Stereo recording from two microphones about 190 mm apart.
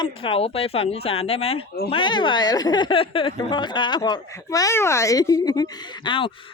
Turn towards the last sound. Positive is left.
turn(degrees=25)  # may be behind; listen again after turning